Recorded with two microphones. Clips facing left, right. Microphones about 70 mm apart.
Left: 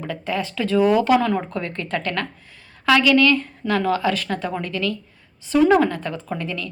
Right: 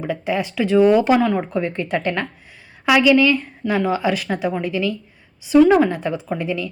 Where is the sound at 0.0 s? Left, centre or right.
Centre.